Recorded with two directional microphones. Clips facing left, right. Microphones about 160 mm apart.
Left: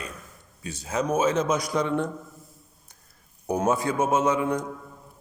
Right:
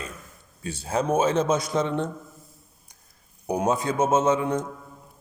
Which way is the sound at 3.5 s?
15° right (ahead or behind).